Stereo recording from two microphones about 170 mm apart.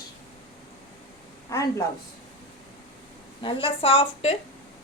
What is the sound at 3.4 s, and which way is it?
Speech, 30° left (ahead or behind).